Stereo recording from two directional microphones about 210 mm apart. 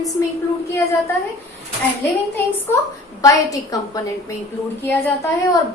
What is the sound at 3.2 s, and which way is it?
Speech, 15° left (ahead or behind).